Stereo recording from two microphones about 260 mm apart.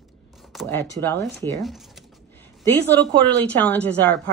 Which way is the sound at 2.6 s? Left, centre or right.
Centre.